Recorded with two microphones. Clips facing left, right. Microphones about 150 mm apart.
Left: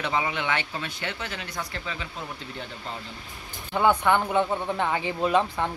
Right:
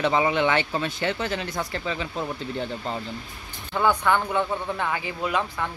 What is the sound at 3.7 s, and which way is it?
Speech, 20° left (ahead or behind).